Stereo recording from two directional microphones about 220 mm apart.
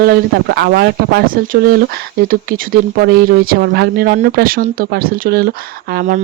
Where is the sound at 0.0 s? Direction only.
45° right (ahead or behind).